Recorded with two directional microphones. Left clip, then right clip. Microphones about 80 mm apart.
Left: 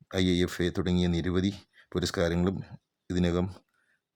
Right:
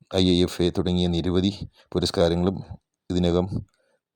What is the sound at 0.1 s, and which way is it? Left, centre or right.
Speech, right.